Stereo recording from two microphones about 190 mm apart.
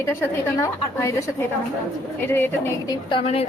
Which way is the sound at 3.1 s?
30° left (ahead or behind).